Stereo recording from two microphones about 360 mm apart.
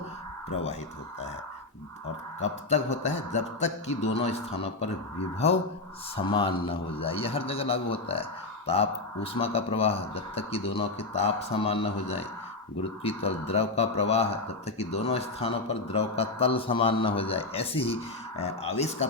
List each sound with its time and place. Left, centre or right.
2.6 s a man's voice: centre